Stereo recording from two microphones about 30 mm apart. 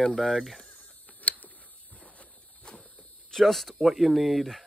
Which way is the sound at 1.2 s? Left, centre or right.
Left.